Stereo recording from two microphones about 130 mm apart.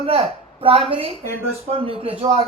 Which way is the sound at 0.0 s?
50° right (ahead or behind).